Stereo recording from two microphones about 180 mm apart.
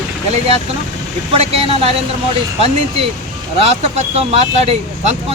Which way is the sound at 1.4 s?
35° right (ahead or behind).